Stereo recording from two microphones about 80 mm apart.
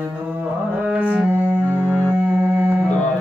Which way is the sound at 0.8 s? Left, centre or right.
Centre.